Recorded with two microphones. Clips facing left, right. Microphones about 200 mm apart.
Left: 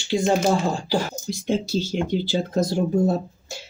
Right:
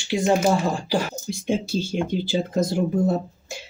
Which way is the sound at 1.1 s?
20° right (ahead or behind).